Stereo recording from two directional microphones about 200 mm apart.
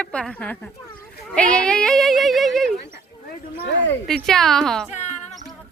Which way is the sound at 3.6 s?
65° left (ahead or behind).